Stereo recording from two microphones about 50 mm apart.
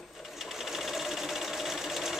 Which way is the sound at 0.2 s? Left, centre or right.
Centre.